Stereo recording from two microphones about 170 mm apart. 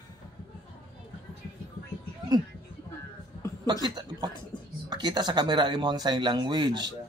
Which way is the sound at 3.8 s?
25° right (ahead or behind).